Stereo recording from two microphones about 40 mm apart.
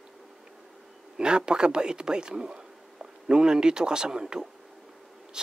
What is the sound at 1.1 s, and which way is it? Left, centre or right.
Speech, right.